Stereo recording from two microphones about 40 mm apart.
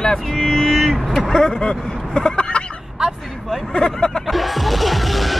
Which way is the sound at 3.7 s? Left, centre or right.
Left.